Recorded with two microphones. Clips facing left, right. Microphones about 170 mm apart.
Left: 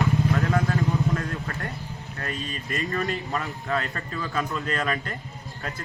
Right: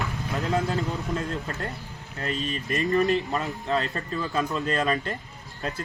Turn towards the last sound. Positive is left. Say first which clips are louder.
# right 2 dB
turn(degrees=-25)  # may be behind; listen again after turning